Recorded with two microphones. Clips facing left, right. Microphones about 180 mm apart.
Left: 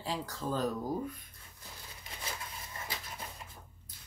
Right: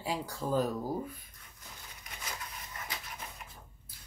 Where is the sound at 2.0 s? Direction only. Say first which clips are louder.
Left 1 dB; 25° left (ahead or behind).